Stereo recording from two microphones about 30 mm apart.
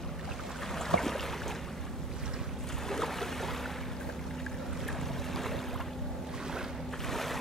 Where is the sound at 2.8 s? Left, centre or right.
Centre.